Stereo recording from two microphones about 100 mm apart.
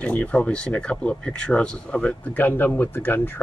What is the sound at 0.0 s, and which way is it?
Speech, 15° left (ahead or behind).